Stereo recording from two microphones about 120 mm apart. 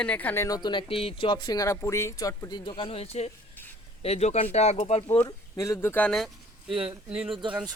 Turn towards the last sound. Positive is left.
turn(degrees=-45)  # may be behind; listen again after turning